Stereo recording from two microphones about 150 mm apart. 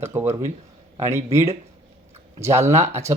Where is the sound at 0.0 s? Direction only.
15° right (ahead or behind).